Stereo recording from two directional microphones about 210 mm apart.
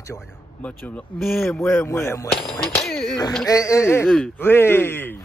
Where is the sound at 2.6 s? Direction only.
5° left (ahead or behind).